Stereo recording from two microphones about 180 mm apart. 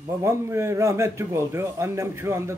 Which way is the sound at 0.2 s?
15° right (ahead or behind).